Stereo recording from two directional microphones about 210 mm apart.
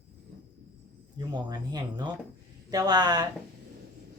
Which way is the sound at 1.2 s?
20° right (ahead or behind).